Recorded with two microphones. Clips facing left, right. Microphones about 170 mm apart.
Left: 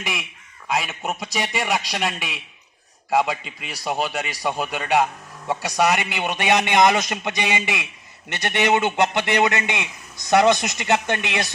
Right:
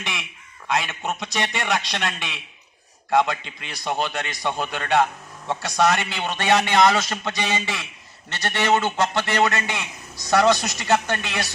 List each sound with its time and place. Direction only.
0.0 s a man's voice: 10° left (ahead or behind)